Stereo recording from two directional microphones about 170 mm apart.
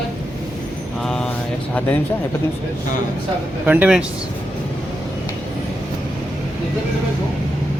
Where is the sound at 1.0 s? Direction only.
5° left (ahead or behind).